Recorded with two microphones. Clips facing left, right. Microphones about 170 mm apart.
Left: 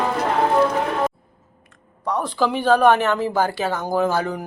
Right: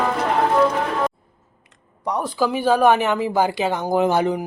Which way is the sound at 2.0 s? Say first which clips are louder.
Even; 10° right (ahead or behind).